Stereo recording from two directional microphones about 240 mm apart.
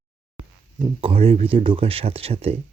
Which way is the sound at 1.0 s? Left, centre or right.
Right.